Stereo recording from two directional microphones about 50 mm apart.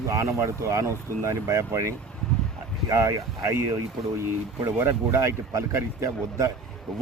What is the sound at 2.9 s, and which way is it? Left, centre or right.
Speech, right.